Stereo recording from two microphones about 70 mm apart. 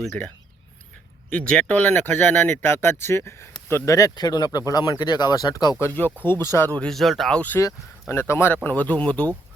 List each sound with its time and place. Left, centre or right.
0.2 s speech: left
4.1 s speech: left
6.2 s speech: left
6.9 s speech: centre
7.3 s speech: left
8.1 s speech: left
8.6 s speech: left